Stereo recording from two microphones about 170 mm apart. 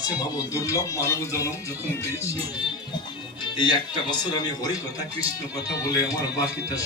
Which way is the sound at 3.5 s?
25° left (ahead or behind).